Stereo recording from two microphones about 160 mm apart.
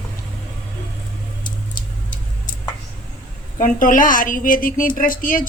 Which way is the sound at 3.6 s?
55° left (ahead or behind).